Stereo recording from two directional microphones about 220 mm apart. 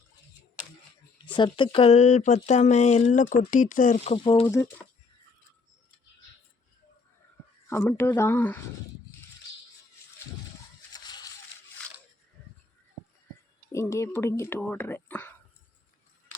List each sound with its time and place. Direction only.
1.2 s speech: 20° left (ahead or behind)
7.7 s speech: 10° left (ahead or behind)
10.9 s a sound: 20° left (ahead or behind)
13.7 s speech: 15° left (ahead or behind)